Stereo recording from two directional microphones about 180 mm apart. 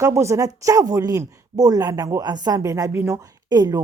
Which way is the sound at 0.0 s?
15° right (ahead or behind).